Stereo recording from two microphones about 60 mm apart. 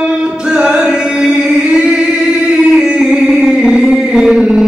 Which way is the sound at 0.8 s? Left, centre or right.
Centre.